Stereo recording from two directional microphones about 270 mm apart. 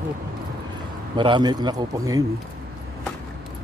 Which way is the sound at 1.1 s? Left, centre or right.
Centre.